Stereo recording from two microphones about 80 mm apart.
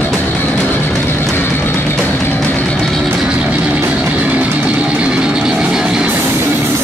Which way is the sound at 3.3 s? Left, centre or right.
Centre.